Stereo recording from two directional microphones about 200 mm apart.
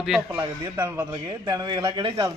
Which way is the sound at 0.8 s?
10° right (ahead or behind).